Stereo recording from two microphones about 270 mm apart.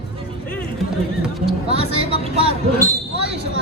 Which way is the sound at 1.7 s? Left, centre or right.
Right.